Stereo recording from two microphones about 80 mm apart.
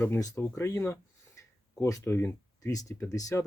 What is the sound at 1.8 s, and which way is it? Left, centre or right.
Speech, left.